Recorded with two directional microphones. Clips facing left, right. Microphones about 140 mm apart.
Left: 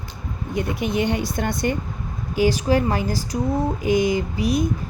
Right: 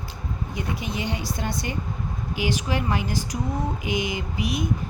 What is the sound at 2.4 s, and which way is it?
A woman's voice, 35° left (ahead or behind).